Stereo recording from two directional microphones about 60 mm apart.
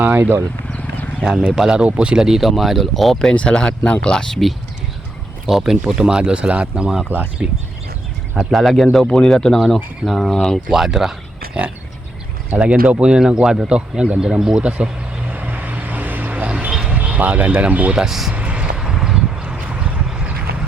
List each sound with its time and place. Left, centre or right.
0.0 s speech: right
1.2 s speech: centre
3.3 s speech: centre
5.5 s speech: centre
7.1 s speech: right
8.4 s speech: centre
10.7 s speech: centre
12.5 s speech: centre
14.6 s vehicle: centre
16.9 s speech: centre
18.0 s speech: centre
18.3 s vehicle: right
18.8 s vehicle: centre